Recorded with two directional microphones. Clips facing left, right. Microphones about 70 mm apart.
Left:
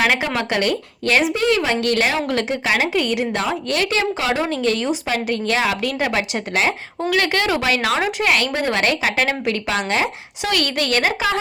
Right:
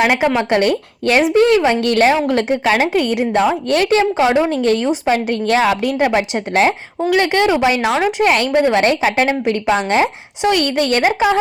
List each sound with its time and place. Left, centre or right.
0.0 s speech: centre
0.5 s a woman's voice: right
4.1 s a woman's voice: right
5.9 s a woman's voice: right
7.1 s speech: right
8.2 s a woman's voice: right
8.5 s a woman's voice: centre
8.8 s speech: right